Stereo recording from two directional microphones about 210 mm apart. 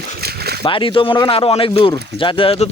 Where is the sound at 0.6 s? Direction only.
25° left (ahead or behind).